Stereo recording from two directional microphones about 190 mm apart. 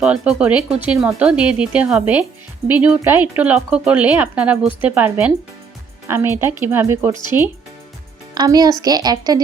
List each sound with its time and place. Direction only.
0.0 s a woman's voice: 5° right (ahead or behind); by 9.4 s 20° right (ahead or behind)